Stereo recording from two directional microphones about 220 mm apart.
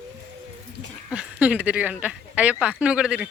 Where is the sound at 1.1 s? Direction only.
5° right (ahead or behind).